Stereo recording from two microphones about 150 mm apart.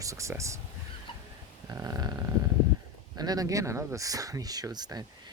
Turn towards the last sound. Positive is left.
turn(degrees=-25)  # may be behind; listen again after turning